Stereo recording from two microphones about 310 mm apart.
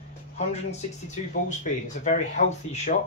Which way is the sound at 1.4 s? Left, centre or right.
Left.